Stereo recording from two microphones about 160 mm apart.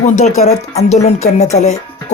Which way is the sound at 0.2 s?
45° left (ahead or behind).